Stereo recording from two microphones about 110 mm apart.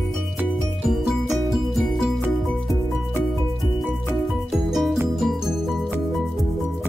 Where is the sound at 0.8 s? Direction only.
5° right (ahead or behind).